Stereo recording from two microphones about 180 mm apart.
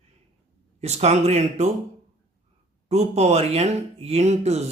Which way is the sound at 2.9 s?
40° right (ahead or behind).